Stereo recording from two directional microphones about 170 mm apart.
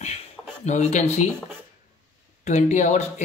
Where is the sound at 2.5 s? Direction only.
45° left (ahead or behind).